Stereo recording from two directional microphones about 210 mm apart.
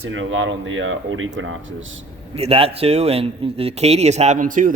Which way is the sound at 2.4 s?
30° right (ahead or behind).